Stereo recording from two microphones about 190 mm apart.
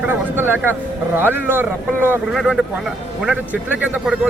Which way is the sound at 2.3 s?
Centre (ahead or behind).